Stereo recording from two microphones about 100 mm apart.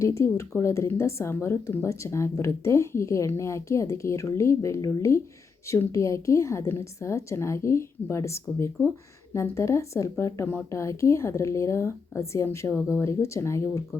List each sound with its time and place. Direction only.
0.0 s speech: 30° left (ahead or behind)